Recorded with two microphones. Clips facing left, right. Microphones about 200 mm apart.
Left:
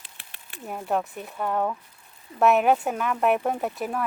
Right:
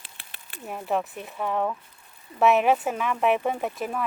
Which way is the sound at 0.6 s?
Centre (ahead or behind).